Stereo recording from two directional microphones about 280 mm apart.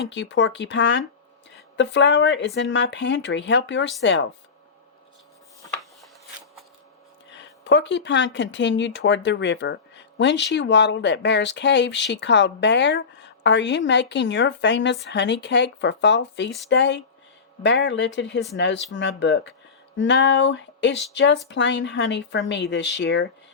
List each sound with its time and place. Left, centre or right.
0.1 s a woman's voice: left
7.3 s a woman's voice: left